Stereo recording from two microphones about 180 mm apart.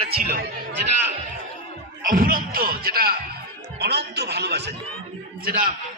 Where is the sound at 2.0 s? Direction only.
50° right (ahead or behind); by 4.7 s 65° right (ahead or behind).